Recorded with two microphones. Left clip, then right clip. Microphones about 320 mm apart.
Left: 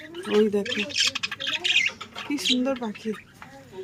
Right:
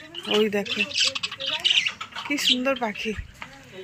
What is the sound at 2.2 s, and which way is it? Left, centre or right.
Speech, centre.